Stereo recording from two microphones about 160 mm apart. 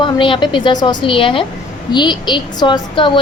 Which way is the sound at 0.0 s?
30° left (ahead or behind).